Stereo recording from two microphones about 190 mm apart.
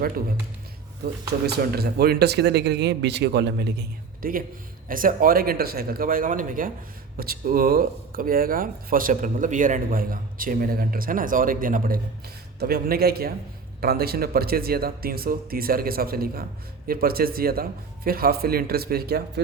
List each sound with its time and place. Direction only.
1.5 s speech: 55° right (ahead or behind)